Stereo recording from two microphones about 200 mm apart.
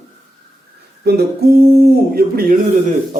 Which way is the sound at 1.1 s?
50° right (ahead or behind).